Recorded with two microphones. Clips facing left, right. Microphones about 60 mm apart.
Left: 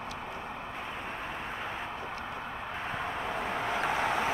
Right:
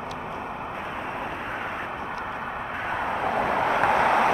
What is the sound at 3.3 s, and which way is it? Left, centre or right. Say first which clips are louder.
Vehicle: right 10 dB; right.